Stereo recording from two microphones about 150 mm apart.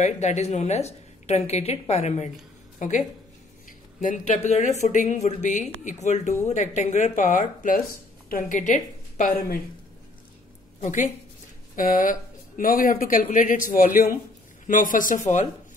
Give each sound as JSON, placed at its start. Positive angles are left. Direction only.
{"t": 0.0, "sound": "speech", "side_deg": 50}
{"t": 3.6, "sound": "a woman's voice", "side_deg": 55}
{"t": 10.8, "sound": "a woman's voice", "side_deg": 55}
{"t": 11.7, "sound": "speech", "side_deg": 65}